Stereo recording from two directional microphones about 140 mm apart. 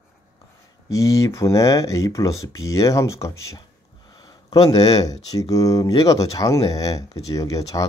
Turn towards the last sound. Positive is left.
turn(degrees=25)  # may be behind; listen again after turning